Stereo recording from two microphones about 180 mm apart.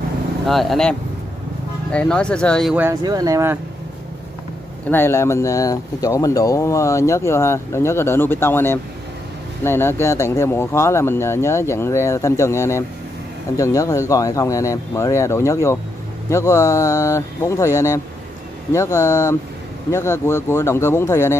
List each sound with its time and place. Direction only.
0.5 s speech: centre (ahead or behind)
2.7 s speech: 10° right (ahead or behind)
4.9 s speech: 15° left (ahead or behind)